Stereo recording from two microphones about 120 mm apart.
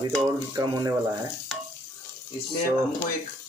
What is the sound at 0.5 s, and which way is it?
Speech, 30° right (ahead or behind).